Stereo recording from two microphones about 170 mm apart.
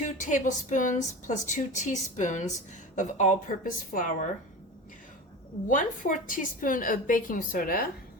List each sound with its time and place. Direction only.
0.2 s a woman's voice: 50° left (ahead or behind)
5.6 s a woman's voice: 50° left (ahead or behind)